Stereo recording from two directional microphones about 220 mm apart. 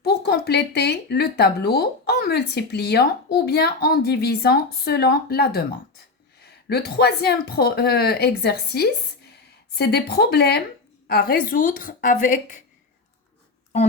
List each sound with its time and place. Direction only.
0.0 s a woman's voice: 45° left (ahead or behind)